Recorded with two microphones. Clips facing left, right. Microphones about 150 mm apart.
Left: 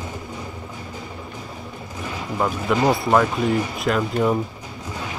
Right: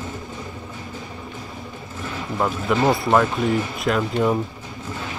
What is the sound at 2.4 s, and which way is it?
Speech, centre (ahead or behind).